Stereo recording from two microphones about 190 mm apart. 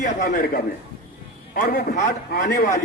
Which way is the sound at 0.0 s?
45° left (ahead or behind).